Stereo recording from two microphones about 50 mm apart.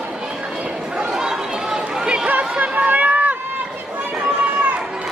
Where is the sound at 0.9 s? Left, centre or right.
Centre.